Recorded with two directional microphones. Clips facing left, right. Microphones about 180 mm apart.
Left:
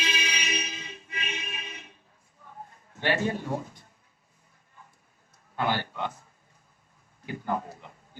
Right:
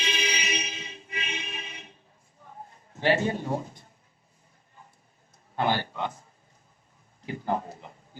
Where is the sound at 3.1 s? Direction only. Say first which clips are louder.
Right 2 dB; 30° right (ahead or behind).